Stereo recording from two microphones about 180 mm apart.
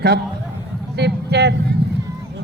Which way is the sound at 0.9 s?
65° right (ahead or behind).